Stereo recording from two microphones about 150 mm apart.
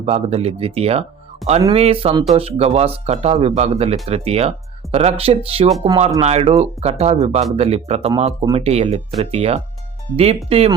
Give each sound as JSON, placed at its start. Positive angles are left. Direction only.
{"t": 0.0, "sound": "speech", "side_deg": -40}